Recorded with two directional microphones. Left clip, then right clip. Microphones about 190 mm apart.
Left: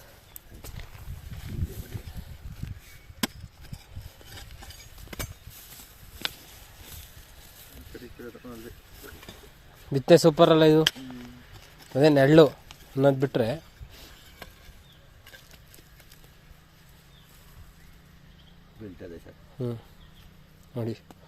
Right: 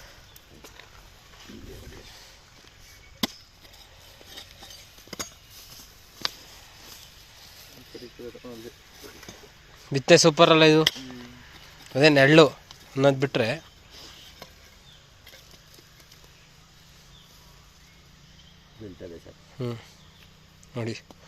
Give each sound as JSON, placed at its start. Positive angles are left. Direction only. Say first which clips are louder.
{"t": 9.9, "sound": "speech", "louder": "right 1 dB", "side_deg": 20}
{"t": 11.9, "sound": "speech", "louder": "right 1 dB", "side_deg": 20}
{"t": 19.5, "sound": "a sound", "louder": "even", "side_deg": 15}
{"t": 20.7, "sound": "speech", "louder": "right 1 dB", "side_deg": 20}